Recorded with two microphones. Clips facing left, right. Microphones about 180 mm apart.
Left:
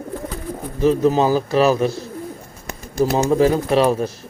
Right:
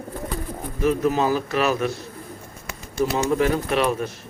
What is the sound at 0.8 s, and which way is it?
A man's voice, 30° left (ahead or behind).